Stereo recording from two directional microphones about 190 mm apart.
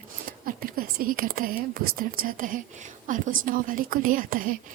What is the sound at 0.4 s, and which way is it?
Speech, 50° right (ahead or behind).